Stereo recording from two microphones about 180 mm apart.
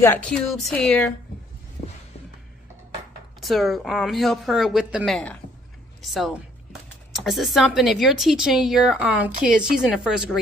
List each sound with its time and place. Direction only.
0.0 s a woman's voice: 10° left (ahead or behind)
3.3 s speech: centre (ahead or behind)
9.3 s speech: 50° right (ahead or behind)
9.6 s speech: 5° right (ahead or behind)